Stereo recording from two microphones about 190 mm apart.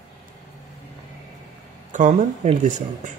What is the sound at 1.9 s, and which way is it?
Speech, 40° right (ahead or behind).